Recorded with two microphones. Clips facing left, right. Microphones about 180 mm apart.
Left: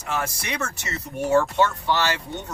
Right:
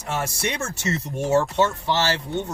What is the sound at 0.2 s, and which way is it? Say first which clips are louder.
Speech: right 2 dB; 25° right (ahead or behind).